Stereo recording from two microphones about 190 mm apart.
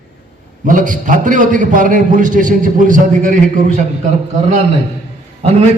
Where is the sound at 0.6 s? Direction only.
40° right (ahead or behind).